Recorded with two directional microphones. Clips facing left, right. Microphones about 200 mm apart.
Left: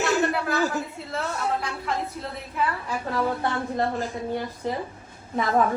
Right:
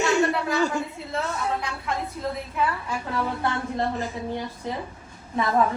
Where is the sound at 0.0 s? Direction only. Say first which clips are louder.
Right 1 dB; centre (ahead or behind).